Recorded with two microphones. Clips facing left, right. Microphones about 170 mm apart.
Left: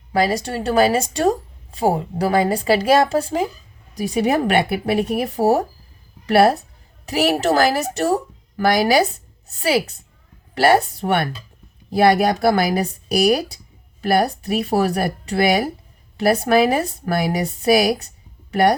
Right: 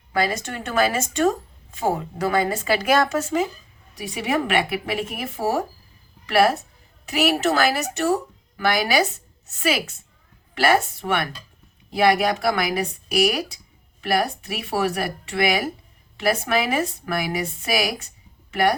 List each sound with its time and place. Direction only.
0.1 s a woman's voice: 30° left (ahead or behind)